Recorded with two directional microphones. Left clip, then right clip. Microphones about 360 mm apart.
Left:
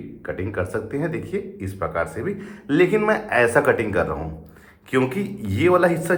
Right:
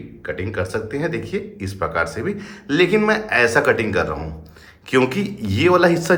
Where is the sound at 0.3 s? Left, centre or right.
Centre.